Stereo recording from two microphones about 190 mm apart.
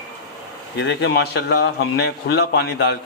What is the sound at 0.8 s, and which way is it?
A man's voice, 70° left (ahead or behind).